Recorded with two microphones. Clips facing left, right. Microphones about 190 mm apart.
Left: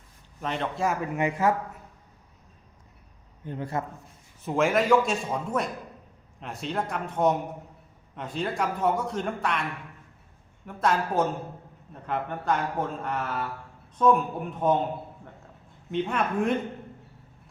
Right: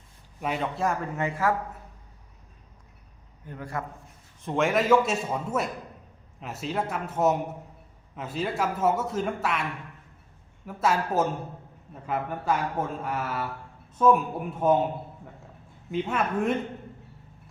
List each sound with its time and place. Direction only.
0.4 s speech: 5° right (ahead or behind)
1.1 s speech: 15° left (ahead or behind)
3.4 s a man's voice: 25° left (ahead or behind)
4.4 s a man's voice: centre (ahead or behind)
10.7 s a man's voice: 5° right (ahead or behind)
15.9 s a man's voice: 5° right (ahead or behind)